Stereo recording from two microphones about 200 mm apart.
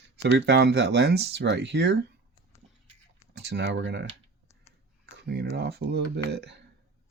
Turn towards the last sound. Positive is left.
turn(degrees=-55)  # may be behind; listen again after turning